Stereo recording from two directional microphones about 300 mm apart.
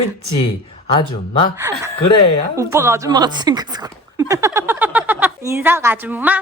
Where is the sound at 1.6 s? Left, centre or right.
Centre.